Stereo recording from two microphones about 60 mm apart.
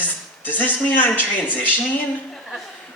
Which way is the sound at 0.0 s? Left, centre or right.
Left.